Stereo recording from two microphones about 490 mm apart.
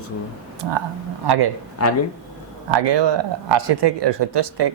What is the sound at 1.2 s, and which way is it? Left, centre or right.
Speech, right.